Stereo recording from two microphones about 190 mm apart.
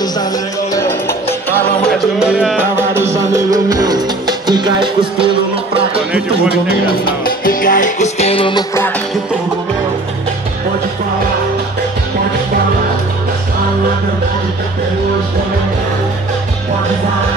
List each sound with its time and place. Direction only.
0.7 s music: 15° left (ahead or behind)
1.9 s music: centre (ahead or behind); by 5.3 s 25° right (ahead or behind)
6.5 s music: 50° left (ahead or behind); by 8.6 s 25° left (ahead or behind)